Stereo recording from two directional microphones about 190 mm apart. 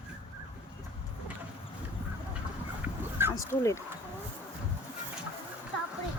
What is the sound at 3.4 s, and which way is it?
Speech, 15° left (ahead or behind).